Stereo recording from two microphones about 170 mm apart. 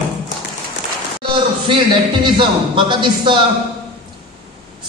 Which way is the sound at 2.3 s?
30° right (ahead or behind).